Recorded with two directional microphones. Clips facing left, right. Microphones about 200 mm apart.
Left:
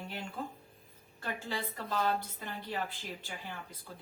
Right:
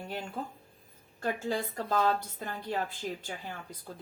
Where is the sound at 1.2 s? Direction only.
45° right (ahead or behind).